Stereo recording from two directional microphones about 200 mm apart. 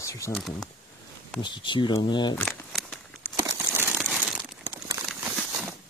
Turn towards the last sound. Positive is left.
turn(degrees=0)  # may be behind; listen again after turning